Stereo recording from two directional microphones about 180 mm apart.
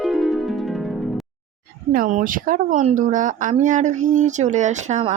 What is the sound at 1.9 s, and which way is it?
Speech, 50° right (ahead or behind).